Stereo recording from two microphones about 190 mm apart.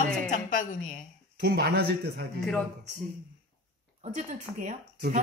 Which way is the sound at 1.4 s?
55° right (ahead or behind).